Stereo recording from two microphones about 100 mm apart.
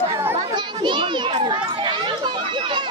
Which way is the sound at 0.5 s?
50° right (ahead or behind).